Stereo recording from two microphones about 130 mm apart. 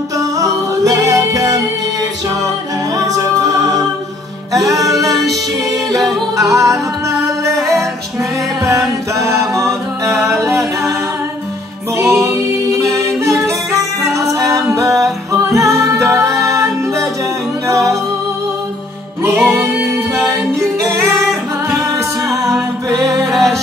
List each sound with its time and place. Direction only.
0.4 s music: 25° right (ahead or behind)
4.6 s music: 25° right (ahead or behind)
5.1 s music: centre (ahead or behind)
5.9 s music: 25° right (ahead or behind)
12.0 s music: 20° right (ahead or behind)
19.2 s music: 20° right (ahead or behind)
22.4 s music: 25° right (ahead or behind)
23.3 s music: centre (ahead or behind)